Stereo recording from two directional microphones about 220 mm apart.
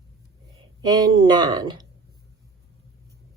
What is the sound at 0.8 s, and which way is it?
Speech, 20° right (ahead or behind).